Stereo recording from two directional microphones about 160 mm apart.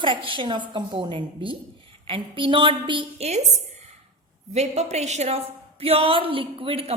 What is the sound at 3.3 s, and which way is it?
A woman's voice, 45° right (ahead or behind).